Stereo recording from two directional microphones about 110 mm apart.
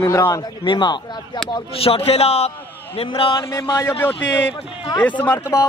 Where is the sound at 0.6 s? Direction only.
45° left (ahead or behind).